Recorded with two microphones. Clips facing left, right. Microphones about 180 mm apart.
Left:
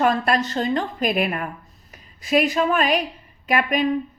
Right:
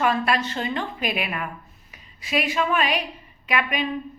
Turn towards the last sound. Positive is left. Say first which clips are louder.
# left 4 dB
turn(degrees=45)  # may be behind; listen again after turning